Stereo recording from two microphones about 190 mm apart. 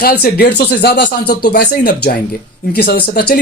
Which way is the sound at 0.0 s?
55° left (ahead or behind).